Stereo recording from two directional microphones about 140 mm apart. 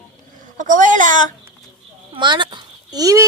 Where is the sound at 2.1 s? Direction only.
35° right (ahead or behind).